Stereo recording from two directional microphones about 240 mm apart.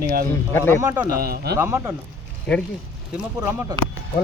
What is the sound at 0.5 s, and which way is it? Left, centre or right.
Speech, centre.